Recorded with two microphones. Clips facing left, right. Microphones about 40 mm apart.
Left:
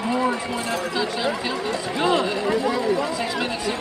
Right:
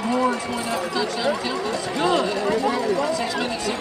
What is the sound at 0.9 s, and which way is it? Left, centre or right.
Speech, centre.